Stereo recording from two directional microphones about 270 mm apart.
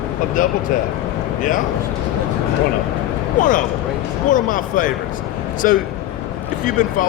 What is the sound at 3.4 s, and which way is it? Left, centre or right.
Speech, left.